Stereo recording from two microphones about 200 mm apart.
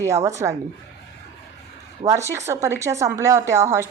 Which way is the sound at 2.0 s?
15° right (ahead or behind).